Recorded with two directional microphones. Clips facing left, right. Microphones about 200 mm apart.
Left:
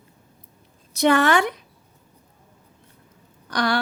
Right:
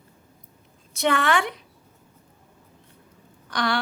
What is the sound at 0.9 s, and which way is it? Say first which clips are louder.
Speech: left 5 dB; 40° left (ahead or behind).